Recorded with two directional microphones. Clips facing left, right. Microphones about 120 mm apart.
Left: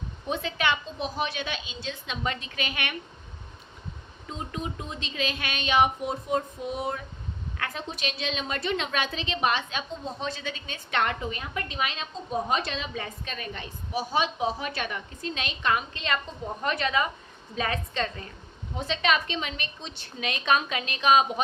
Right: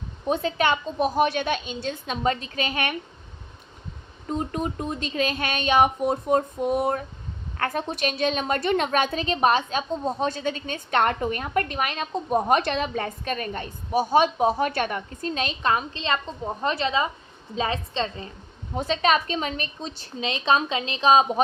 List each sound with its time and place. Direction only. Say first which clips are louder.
0.3 s a woman's voice: right 5 dB; 40° right (ahead or behind)
4.3 s a woman's voice: right 7 dB; 45° right (ahead or behind); by 18.3 s 25° right (ahead or behind)
18.7 s a woman's voice: right 4 dB; 40° right (ahead or behind)